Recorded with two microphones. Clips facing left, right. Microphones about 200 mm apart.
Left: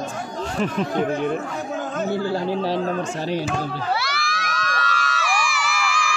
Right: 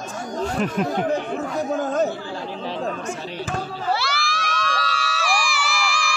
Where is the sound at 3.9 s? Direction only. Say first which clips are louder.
Right 1 dB; 30° right (ahead or behind).